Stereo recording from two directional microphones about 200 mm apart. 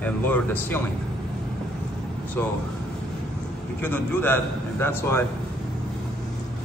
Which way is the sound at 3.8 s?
10° left (ahead or behind).